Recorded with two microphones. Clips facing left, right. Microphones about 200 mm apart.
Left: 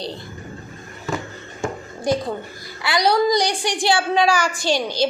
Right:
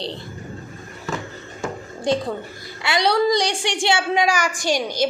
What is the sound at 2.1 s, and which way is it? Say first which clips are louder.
A woman's voice: even; 25° right (ahead or behind).